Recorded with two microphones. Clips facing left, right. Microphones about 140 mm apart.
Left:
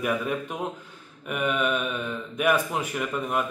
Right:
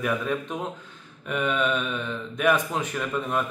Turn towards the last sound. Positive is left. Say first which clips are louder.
# even
turn(degrees=5)  # may be behind; listen again after turning